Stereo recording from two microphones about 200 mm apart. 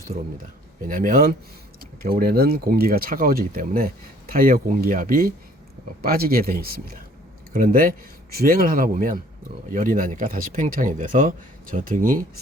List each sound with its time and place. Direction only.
0.9 s speech: 45° right (ahead or behind)